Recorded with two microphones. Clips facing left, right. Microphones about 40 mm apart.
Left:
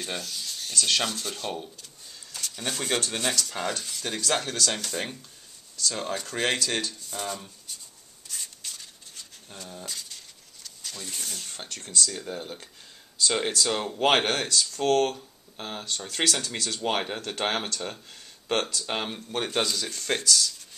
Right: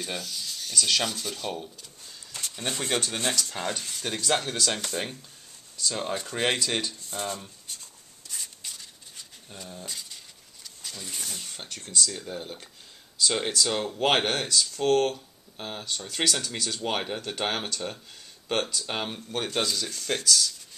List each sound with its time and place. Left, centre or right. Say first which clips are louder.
0.0 s speech: even; centre
2.5 s speech: even; centre
2.8 s speech: even; centre
3.2 s speech: left 1 dB; centre
5.8 s speech: even; centre
7.1 s dishes: right 1 dB; centre
8.4 s a sound: even; centre
9.5 s speech: even; centre
9.8 s a sound: even; centre
12.3 s speech: left 1 dB; centre